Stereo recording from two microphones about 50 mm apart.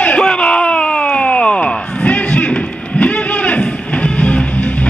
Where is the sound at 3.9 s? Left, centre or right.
Left.